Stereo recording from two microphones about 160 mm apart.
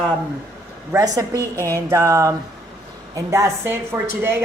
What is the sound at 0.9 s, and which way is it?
A woman's voice, 20° right (ahead or behind).